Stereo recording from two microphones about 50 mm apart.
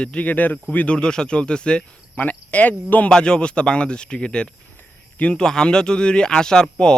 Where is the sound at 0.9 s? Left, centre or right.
Centre.